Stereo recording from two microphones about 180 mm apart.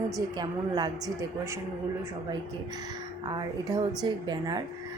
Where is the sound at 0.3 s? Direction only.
25° right (ahead or behind).